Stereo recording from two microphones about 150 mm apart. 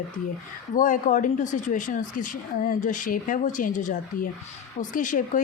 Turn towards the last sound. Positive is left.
turn(degrees=60)  # may be behind; listen again after turning